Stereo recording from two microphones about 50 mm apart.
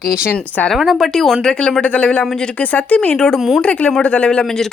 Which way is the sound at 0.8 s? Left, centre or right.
Centre.